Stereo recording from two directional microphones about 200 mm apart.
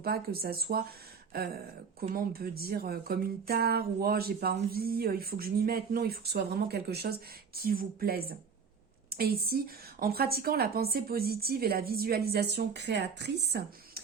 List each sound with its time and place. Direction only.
0.0 s speech: 50° right (ahead or behind)